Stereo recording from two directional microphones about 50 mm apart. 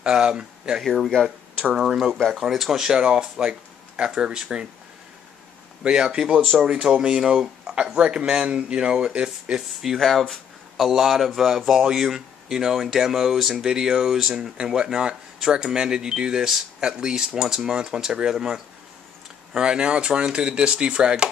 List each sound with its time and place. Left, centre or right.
0.0 s speech: centre
0.8 s speech: centre
1.8 s speech: centre
2.1 s speech: centre
2.4 s speech: centre
5.9 s speech: centre
9.8 s speech: centre